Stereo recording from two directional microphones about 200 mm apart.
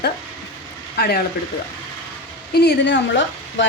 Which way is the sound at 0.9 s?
55° left (ahead or behind).